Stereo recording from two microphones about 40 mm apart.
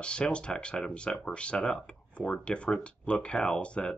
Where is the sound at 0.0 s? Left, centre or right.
Left.